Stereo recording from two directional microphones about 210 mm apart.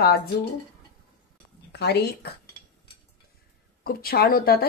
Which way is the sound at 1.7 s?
50° left (ahead or behind).